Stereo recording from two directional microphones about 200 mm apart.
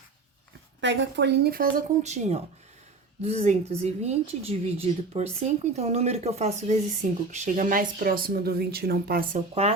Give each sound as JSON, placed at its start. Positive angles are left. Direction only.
{"t": 0.8, "sound": "speech", "side_deg": -60}